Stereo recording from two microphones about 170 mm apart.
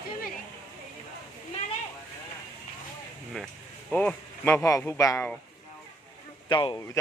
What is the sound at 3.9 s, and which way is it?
Speech, 10° left (ahead or behind).